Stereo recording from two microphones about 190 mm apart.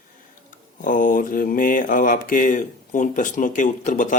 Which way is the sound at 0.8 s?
45° left (ahead or behind).